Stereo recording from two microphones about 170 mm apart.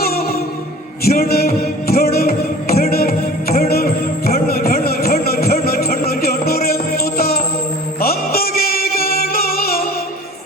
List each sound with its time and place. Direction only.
1.0 s music: 60° left (ahead or behind)